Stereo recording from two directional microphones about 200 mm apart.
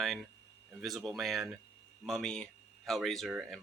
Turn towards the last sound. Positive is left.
turn(degrees=0)  # may be behind; listen again after turning